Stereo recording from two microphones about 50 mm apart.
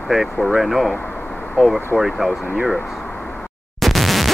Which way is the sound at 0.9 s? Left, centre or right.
Left.